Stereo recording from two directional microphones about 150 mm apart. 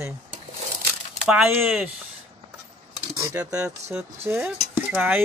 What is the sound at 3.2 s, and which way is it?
Speech, 20° right (ahead or behind).